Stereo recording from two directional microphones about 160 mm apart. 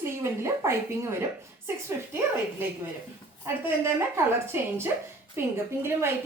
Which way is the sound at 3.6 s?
15° right (ahead or behind).